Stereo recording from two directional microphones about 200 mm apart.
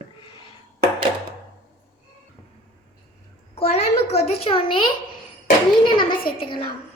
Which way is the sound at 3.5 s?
30° left (ahead or behind).